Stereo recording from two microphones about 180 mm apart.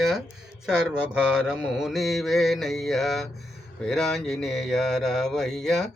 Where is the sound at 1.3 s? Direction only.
5° right (ahead or behind).